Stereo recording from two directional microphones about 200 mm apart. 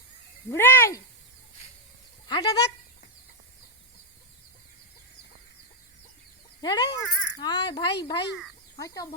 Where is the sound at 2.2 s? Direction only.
20° left (ahead or behind).